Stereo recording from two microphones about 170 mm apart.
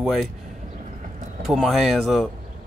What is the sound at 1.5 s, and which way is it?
Speech, centre (ahead or behind).